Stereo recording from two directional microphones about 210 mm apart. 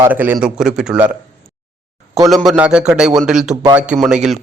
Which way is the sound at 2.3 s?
5° right (ahead or behind).